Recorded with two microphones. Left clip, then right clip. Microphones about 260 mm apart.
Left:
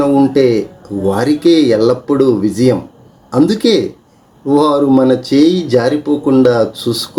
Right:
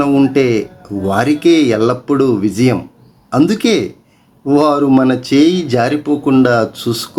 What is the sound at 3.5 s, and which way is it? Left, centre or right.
Speech, right.